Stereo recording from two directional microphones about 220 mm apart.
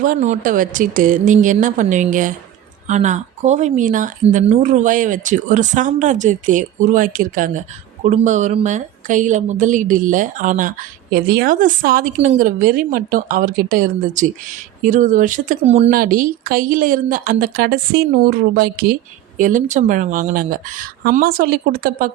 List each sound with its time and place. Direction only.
0.0 s speech: 35° right (ahead or behind)
15.9 s a woman's voice: 40° right (ahead or behind)